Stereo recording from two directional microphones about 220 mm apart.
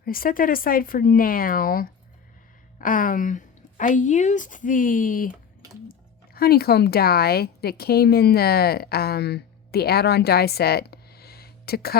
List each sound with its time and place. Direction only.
0.0 s speech: 40° left (ahead or behind)